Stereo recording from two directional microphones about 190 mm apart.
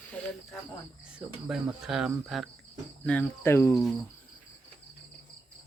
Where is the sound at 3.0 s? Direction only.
10° left (ahead or behind).